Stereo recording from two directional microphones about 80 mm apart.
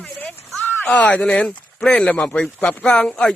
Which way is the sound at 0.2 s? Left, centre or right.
Centre.